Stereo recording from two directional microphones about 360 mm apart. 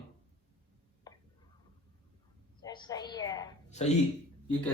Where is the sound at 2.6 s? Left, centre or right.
Centre.